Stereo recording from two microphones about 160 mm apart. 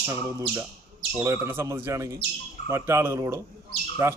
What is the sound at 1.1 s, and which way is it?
Speech, 15° right (ahead or behind).